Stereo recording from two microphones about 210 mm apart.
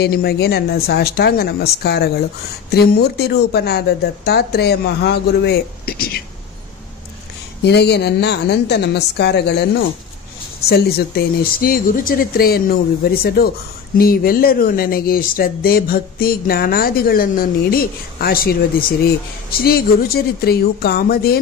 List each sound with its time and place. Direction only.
0.0 s speech: 50° left (ahead or behind)
7.6 s speech: 50° left (ahead or behind)